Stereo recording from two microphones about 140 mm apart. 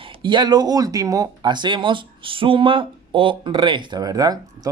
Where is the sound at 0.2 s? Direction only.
35° right (ahead or behind).